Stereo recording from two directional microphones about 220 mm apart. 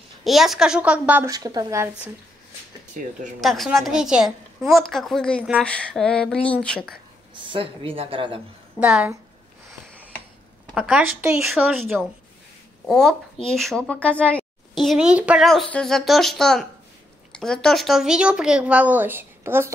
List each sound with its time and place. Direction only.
0.2 s a woman's voice: centre (ahead or behind)
2.9 s speech: 35° right (ahead or behind)
3.3 s a woman's voice: centre (ahead or behind)
7.4 s speech: 25° right (ahead or behind)
8.7 s a woman's voice: 5° right (ahead or behind)
10.7 s a woman's voice: 5° right (ahead or behind)